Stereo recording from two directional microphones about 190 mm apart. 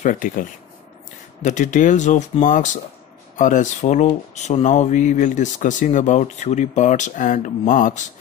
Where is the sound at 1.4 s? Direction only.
40° left (ahead or behind).